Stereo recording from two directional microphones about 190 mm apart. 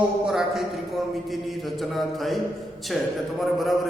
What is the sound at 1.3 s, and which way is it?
A man's voice, centre (ahead or behind).